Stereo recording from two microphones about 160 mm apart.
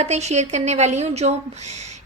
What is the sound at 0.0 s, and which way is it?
A woman's voice, 45° right (ahead or behind).